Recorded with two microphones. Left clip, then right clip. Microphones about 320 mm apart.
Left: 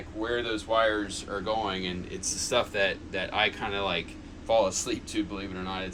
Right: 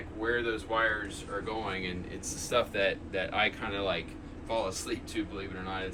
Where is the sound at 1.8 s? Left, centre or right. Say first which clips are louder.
Left 3 dB; centre.